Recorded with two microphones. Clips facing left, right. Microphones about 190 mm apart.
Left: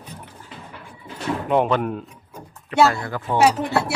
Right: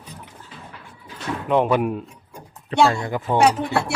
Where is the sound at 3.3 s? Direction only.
5° left (ahead or behind).